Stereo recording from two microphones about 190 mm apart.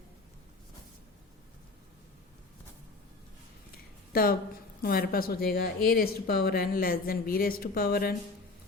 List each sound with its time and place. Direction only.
4.1 s a woman's voice: 50° left (ahead or behind)